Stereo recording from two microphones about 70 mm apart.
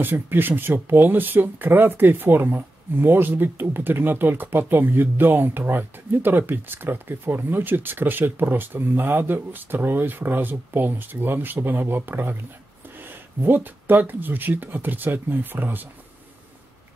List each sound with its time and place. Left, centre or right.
0.0 s speech: right